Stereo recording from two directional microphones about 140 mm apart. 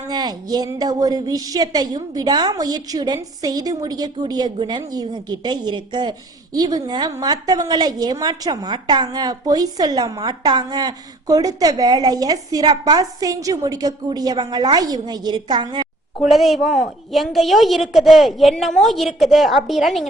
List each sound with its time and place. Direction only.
0.1 s a woman's voice: 30° right (ahead or behind)
16.2 s a woman's voice: centre (ahead or behind)